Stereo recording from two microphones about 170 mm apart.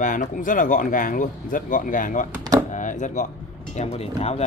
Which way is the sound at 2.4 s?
20° right (ahead or behind).